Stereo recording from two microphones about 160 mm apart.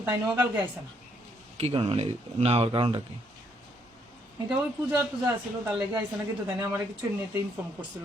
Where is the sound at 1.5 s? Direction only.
35° right (ahead or behind).